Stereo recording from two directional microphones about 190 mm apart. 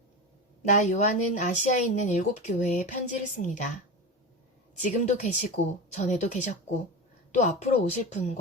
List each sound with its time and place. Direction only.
0.7 s speech: 40° left (ahead or behind)
4.8 s speech: 40° left (ahead or behind)